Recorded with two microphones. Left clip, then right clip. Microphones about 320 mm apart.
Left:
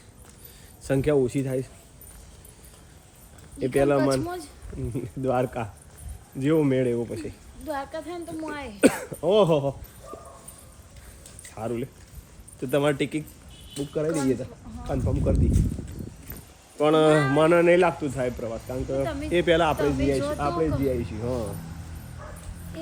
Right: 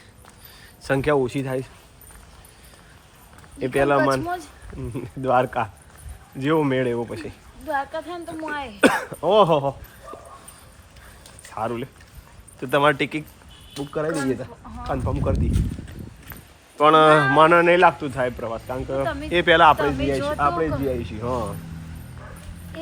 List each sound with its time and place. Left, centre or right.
0.8 s a man's voice: centre
3.6 s a man's voice: centre
11.5 s a man's voice: centre
16.7 s a man's voice: centre